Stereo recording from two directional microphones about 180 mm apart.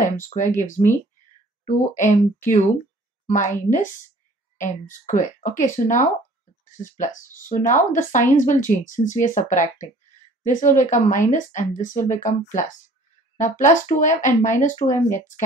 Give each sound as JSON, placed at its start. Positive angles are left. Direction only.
{"t": 0.0, "sound": "speech", "side_deg": 45}